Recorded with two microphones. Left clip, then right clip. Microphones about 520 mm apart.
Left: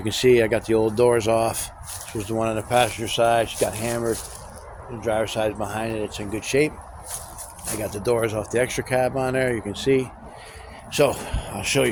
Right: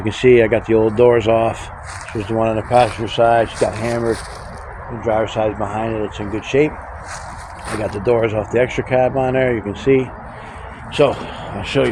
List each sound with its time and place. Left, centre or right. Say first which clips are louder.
0.0 s speech: right 6 dB; left
5.0 s speech: right 6 dB; left
7.9 s speech: right 6 dB; left